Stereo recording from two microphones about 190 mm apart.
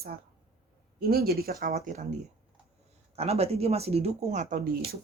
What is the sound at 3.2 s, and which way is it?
Speech, 35° right (ahead or behind).